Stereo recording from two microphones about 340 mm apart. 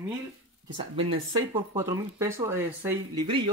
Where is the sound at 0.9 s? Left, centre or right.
Centre.